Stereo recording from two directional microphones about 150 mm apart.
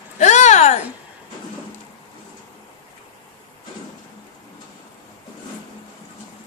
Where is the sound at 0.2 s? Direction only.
50° left (ahead or behind).